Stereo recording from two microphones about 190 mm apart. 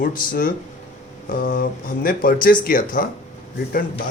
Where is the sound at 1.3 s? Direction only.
50° left (ahead or behind).